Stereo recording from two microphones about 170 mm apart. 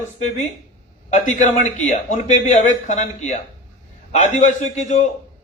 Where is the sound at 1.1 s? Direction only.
45° left (ahead or behind).